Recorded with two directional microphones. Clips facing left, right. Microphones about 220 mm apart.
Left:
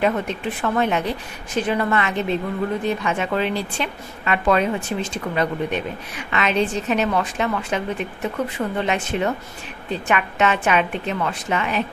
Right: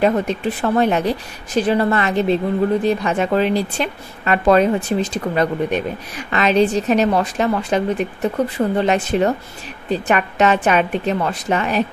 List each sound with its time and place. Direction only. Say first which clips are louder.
0.6 s speech: right 4 dB; 35° right (ahead or behind)